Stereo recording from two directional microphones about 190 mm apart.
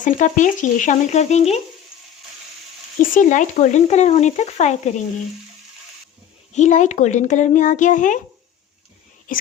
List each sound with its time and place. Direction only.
0.0 s speech: 40° left (ahead or behind)
3.2 s speech: 40° left (ahead or behind)
6.5 s speech: 40° left (ahead or behind)
9.3 s speech: 45° left (ahead or behind)